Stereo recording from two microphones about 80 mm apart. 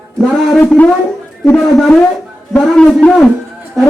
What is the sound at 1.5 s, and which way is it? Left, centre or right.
A man's voice, centre.